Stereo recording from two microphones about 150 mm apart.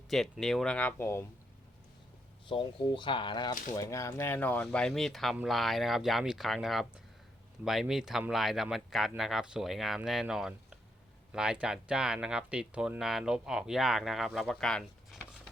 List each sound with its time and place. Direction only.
0.1 s speech: centre (ahead or behind); by 1.2 s 15° left (ahead or behind)
2.5 s speech: 35° left (ahead or behind)
3.8 s speech: 20° left (ahead or behind); by 15.2 s 5° left (ahead or behind)